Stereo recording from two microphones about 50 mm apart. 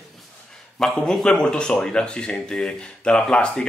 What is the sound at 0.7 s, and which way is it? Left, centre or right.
A man's voice, centre.